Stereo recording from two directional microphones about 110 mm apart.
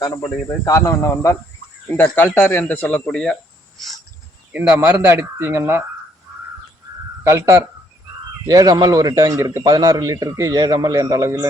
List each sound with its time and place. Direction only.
0.6 s speech: 30° left (ahead or behind); by 3.3 s 10° left (ahead or behind)
4.5 s speech: 15° right (ahead or behind)
7.3 s a man's voice: 25° right (ahead or behind)